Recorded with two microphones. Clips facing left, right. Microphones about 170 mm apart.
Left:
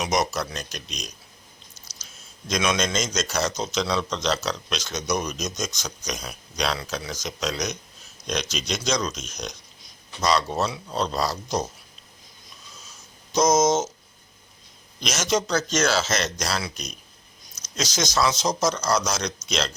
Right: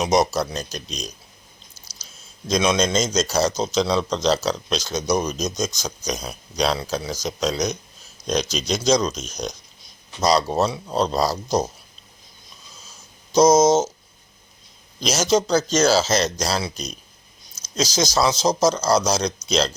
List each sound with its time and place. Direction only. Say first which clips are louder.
0.0 s a man's voice: right 5 dB; 30° right (ahead or behind)
2.5 s a man's voice: right 5 dB; 30° right (ahead or behind)
13.3 s a man's voice: right 5 dB; 30° right (ahead or behind)
15.0 s a man's voice: right 5 dB; 35° right (ahead or behind)